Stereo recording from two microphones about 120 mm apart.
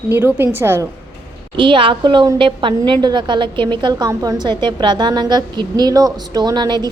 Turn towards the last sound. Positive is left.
turn(degrees=-35)  # may be behind; listen again after turning